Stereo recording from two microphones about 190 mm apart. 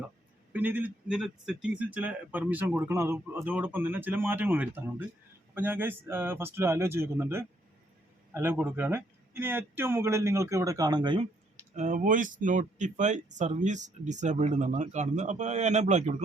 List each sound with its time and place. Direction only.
0.5 s a man's voice: 10° right (ahead or behind); by 11.3 s 25° right (ahead or behind)
11.7 s speech: 40° right (ahead or behind)